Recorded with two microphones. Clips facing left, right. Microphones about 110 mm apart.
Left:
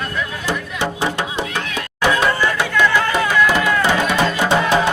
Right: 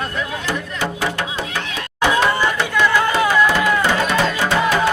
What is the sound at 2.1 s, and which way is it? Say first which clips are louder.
Chatter: right 1 dB; 20° right (ahead or behind).